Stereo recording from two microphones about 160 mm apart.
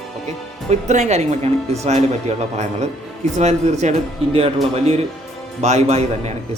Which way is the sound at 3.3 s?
45° right (ahead or behind).